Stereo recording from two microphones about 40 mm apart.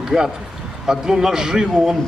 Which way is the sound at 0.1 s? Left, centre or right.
Centre.